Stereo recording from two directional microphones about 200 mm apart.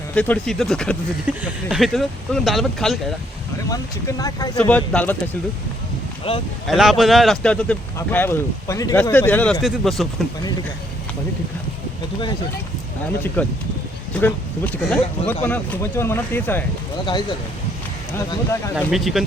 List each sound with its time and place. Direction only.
0.1 s speech: 5° left (ahead or behind)
3.7 s speech: 20° left (ahead or behind)
4.5 s speech: 5° left (ahead or behind)
6.3 s speech: 30° left (ahead or behind)
6.7 s speech: centre (ahead or behind)
13.4 s speech: 5° left (ahead or behind)
18.9 s speech: centre (ahead or behind)